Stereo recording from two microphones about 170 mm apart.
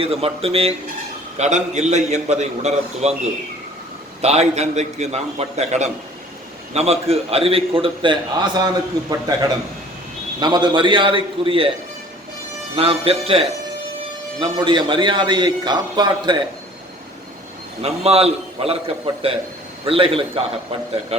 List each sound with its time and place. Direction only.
0.0 s a man's voice: 35° right (ahead or behind)
4.2 s a man's voice: 40° right (ahead or behind)
12.7 s a man's voice: 35° right (ahead or behind)
17.8 s a man's voice: 35° right (ahead or behind)